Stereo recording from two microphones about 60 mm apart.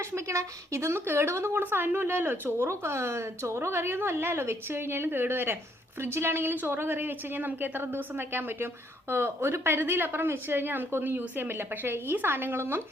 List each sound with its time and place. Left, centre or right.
0.0 s a woman's voice: right
1.6 s a woman's voice: right
2.6 s a woman's voice: right